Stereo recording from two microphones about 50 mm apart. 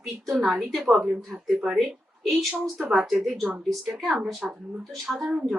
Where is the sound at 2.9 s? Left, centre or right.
Centre.